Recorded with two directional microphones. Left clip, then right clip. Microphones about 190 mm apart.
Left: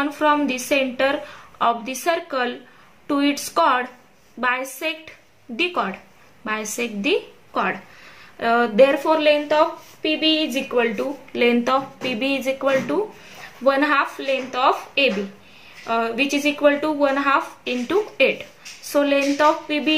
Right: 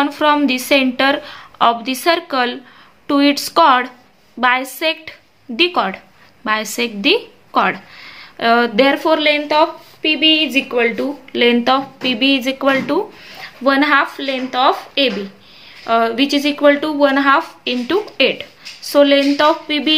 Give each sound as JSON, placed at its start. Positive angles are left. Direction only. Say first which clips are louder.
{"t": 0.0, "sound": "a woman's voice", "louder": "right 5 dB", "side_deg": -40}